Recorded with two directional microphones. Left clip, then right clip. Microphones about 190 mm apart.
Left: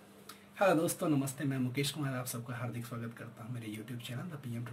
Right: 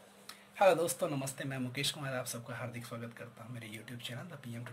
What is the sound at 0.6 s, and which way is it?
Speech, 30° right (ahead or behind).